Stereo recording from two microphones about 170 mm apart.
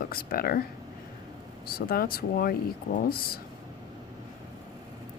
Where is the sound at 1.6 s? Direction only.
60° left (ahead or behind).